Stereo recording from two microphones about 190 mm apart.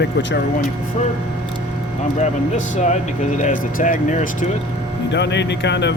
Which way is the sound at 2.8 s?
40° left (ahead or behind).